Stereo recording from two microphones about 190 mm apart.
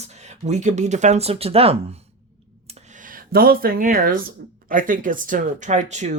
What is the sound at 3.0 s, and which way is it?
Speech, 50° right (ahead or behind).